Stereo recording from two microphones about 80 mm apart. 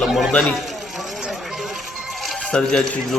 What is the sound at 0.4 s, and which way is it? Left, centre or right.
Music, centre.